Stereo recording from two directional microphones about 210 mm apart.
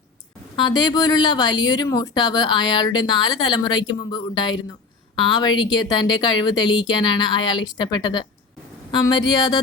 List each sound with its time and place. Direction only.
0.5 s speech: 20° left (ahead or behind)